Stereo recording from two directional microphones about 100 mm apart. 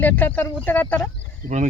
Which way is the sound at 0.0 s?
20° left (ahead or behind).